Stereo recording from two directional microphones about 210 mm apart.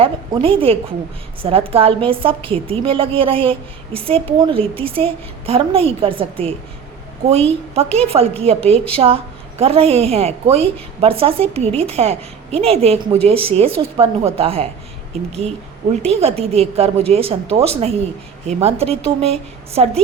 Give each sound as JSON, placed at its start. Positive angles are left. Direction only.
{"t": 0.0, "sound": "a woman's voice", "side_deg": -25}
{"t": 16.0, "sound": "a woman's voice", "side_deg": -30}